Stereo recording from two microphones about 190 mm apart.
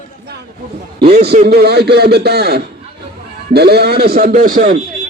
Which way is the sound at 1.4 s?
55° right (ahead or behind).